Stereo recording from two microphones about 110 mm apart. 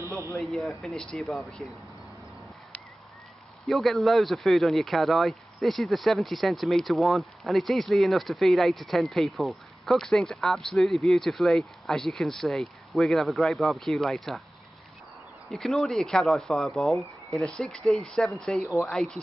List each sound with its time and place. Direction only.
0.0 s speech: 25° right (ahead or behind)
0.4 s speech: 5° left (ahead or behind)
3.6 s speech: centre (ahead or behind)
15.5 s speech: centre (ahead or behind)